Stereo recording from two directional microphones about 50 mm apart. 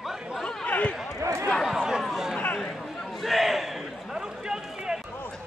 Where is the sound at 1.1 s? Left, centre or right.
Right.